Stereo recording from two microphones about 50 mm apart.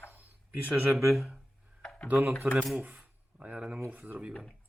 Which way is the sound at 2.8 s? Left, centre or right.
Right.